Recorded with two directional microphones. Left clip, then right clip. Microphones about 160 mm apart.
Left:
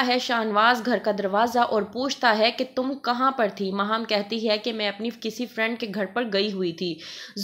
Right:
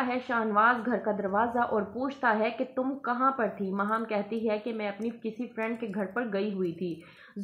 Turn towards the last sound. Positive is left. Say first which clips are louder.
# left 6 dB
turn(degrees=35)  # may be behind; listen again after turning